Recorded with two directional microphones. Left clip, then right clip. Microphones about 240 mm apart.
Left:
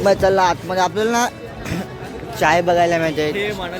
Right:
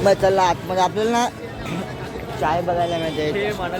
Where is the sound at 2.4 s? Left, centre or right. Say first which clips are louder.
Left 6 dB; left.